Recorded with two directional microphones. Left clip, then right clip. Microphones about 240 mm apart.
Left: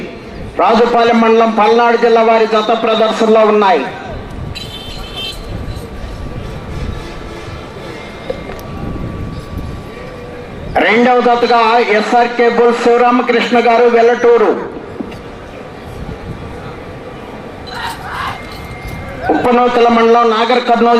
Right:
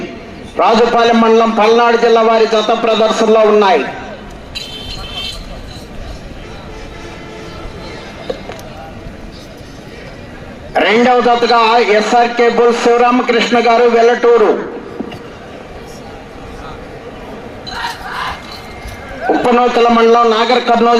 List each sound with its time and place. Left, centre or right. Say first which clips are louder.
0.5 s a man's voice: even; right
10.8 s a man's voice: even; right
19.3 s a man's voice: even; right